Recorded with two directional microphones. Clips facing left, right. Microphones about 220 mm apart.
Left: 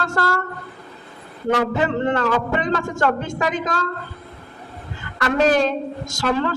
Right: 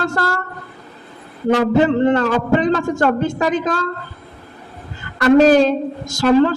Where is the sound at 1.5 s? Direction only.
35° right (ahead or behind).